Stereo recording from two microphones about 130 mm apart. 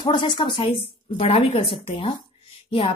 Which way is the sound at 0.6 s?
50° left (ahead or behind).